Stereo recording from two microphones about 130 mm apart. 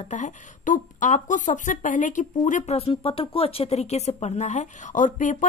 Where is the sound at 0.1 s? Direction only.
70° left (ahead or behind).